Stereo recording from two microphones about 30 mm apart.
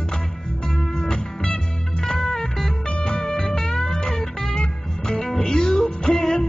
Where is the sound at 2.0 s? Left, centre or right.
Left.